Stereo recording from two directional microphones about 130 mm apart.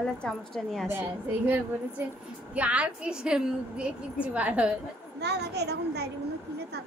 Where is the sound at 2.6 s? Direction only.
10° right (ahead or behind).